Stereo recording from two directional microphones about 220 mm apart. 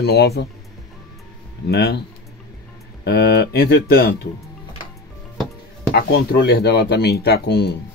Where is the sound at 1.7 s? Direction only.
50° left (ahead or behind).